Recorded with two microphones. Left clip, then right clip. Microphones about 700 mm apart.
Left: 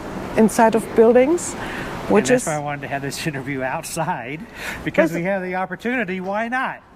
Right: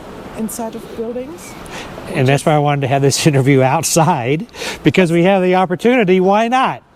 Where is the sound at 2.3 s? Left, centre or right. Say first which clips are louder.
Right 6 dB; right.